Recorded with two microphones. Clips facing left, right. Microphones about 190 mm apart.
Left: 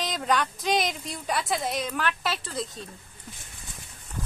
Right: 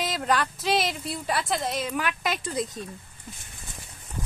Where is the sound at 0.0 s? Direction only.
5° right (ahead or behind).